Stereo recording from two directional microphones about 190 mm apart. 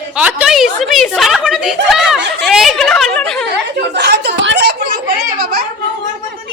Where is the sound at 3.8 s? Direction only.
60° right (ahead or behind).